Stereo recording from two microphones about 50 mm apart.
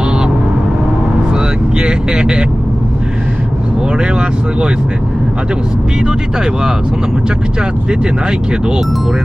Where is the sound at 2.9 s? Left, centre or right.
Centre.